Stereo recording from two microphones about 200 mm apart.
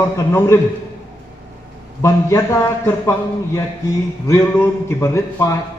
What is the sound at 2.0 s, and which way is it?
Speech, 15° left (ahead or behind).